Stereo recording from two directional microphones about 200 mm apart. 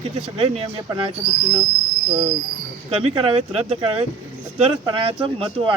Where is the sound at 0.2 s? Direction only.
25° right (ahead or behind).